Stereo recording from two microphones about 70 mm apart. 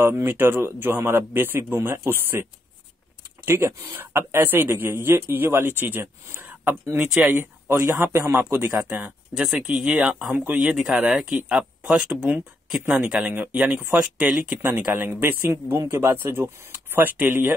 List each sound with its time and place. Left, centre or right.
0.0 s a man's voice: right
3.4 s a man's voice: right
9.3 s speech: centre
10.3 s speech: right
10.6 s speech: centre
13.3 s speech: right
13.9 s speech: centre
14.6 s a man's voice: right